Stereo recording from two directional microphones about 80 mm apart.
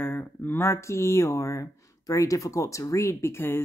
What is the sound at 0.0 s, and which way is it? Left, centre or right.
Speech, left.